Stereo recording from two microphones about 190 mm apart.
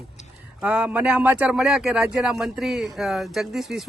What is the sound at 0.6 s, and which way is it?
Speech, 10° right (ahead or behind).